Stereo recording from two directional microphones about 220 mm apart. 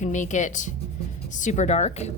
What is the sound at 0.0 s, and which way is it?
Speech, 35° left (ahead or behind).